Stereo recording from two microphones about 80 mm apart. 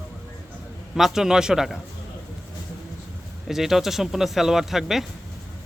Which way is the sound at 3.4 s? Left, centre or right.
Centre.